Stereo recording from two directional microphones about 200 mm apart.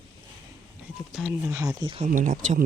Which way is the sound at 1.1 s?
5° right (ahead or behind).